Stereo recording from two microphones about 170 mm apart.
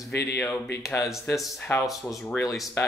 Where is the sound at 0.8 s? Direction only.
15° left (ahead or behind).